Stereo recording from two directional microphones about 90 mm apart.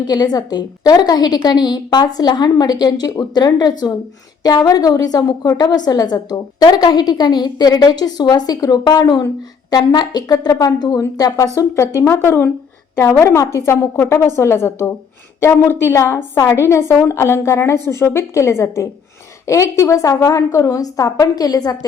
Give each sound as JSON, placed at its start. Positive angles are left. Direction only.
{"t": 0.0, "sound": "a woman's voice", "side_deg": 50}